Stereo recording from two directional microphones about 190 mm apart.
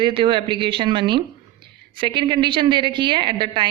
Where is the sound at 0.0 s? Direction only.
25° right (ahead or behind).